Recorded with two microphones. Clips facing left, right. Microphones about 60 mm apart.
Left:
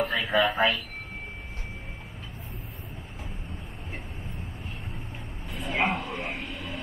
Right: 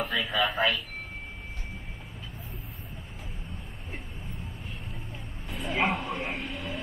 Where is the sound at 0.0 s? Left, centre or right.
Left.